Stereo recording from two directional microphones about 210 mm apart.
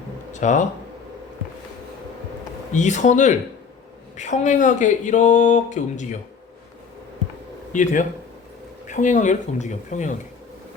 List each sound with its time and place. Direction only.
0.3 s speech: 35° left (ahead or behind)
2.7 s speech: 35° left (ahead or behind)
7.7 s speech: 35° left (ahead or behind)